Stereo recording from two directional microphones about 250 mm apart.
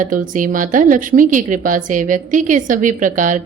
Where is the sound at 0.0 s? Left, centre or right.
Right.